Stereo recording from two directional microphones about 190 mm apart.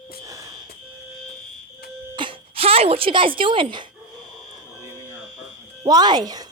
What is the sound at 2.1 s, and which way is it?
Speech, 30° right (ahead or behind).